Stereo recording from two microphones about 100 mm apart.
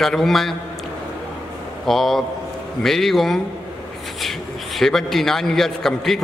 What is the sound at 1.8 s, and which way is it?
A man's voice, centre (ahead or behind).